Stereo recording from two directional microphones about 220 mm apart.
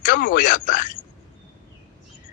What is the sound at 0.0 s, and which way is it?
Speech, 40° left (ahead or behind).